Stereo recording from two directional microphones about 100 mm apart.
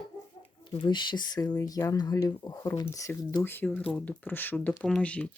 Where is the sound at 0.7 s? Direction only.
55° left (ahead or behind); by 3.1 s 35° left (ahead or behind).